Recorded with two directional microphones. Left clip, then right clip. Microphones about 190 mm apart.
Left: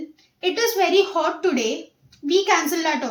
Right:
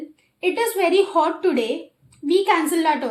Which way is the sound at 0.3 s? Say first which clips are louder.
Even; 20° right (ahead or behind).